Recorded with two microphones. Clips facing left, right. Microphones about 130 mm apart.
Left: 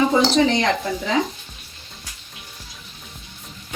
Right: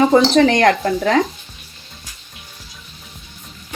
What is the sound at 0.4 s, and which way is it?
Speech, 65° right (ahead or behind).